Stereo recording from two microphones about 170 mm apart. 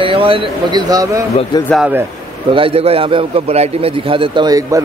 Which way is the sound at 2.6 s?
35° right (ahead or behind).